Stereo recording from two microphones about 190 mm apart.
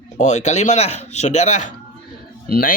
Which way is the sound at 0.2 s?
35° left (ahead or behind).